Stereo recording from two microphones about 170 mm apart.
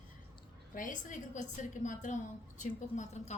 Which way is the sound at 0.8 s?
50° left (ahead or behind).